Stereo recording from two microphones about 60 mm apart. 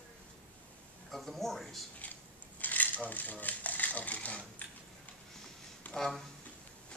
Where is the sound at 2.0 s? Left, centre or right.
Left.